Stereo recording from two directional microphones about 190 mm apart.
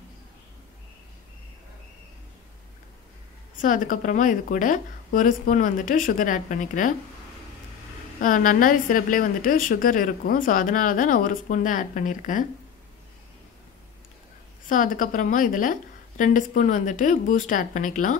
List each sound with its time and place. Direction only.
3.6 s a woman's voice: 45° left (ahead or behind)
8.2 s a woman's voice: 45° left (ahead or behind)
14.7 s a woman's voice: 45° left (ahead or behind)